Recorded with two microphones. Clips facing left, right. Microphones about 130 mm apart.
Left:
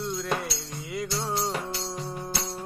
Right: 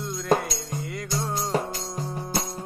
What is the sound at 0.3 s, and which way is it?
Music, 40° right (ahead or behind).